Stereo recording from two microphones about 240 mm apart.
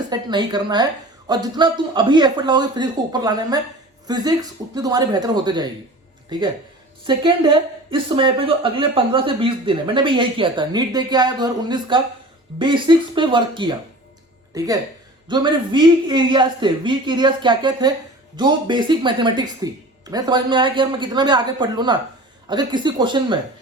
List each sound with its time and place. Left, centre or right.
0.1 s speech: centre
7.1 s a woman's voice: centre